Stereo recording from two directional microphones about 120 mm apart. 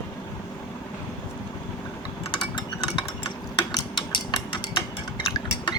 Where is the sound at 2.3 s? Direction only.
40° left (ahead or behind).